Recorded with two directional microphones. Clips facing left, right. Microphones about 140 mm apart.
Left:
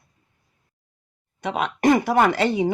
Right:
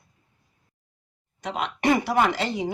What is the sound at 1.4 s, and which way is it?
Speech, 55° left (ahead or behind).